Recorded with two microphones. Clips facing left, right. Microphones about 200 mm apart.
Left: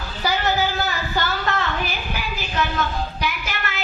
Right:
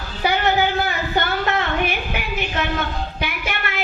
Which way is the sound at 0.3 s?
60° right (ahead or behind).